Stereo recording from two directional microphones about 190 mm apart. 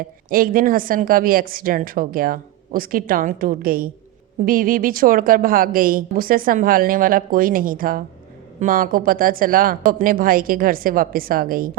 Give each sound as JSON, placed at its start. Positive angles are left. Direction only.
{"t": 0.3, "sound": "a woman's voice", "side_deg": -50}